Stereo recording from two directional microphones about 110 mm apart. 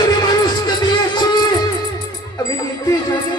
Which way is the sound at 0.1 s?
40° left (ahead or behind).